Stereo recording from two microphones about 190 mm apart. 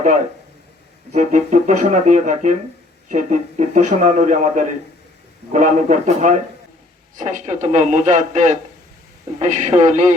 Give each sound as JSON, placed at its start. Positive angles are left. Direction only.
{"t": 1.1, "sound": "speech", "side_deg": -40}